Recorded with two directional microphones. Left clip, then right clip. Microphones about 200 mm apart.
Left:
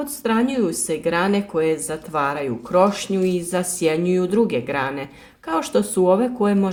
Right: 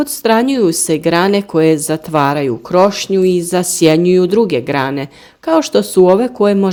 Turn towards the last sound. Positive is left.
turn(degrees=-35)  # may be behind; listen again after turning